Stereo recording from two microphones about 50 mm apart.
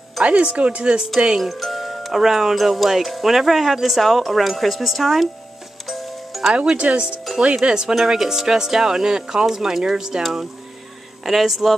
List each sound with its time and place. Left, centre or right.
0.2 s speech: right
1.4 s speech: centre
5.9 s music: centre
6.5 s speech: right
11.2 s speech: centre